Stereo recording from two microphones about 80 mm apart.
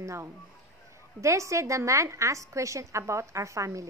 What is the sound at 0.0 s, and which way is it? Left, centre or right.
A woman's voice, right.